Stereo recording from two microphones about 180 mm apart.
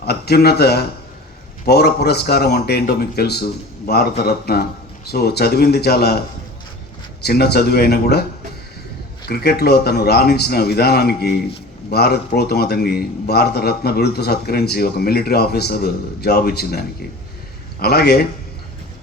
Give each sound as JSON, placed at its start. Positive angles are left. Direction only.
{"t": 0.0, "sound": "a man's voice", "side_deg": 60}
{"t": 9.2, "sound": "a man's voice", "side_deg": 60}